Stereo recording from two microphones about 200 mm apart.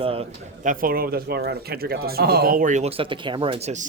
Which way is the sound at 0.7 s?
45° right (ahead or behind).